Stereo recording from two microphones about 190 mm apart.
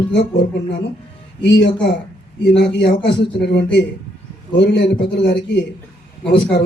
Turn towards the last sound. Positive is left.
turn(degrees=60)  # may be behind; listen again after turning